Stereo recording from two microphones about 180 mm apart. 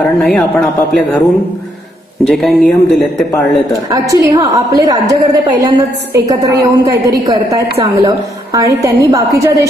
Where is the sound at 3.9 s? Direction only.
20° right (ahead or behind).